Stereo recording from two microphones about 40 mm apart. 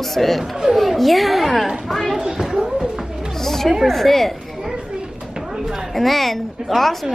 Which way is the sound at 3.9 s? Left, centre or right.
Centre.